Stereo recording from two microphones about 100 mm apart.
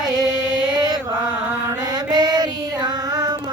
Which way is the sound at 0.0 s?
45° right (ahead or behind).